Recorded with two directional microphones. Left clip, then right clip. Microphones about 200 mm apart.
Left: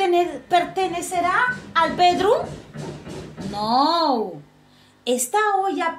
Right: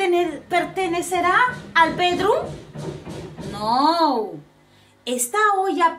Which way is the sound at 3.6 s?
15° left (ahead or behind).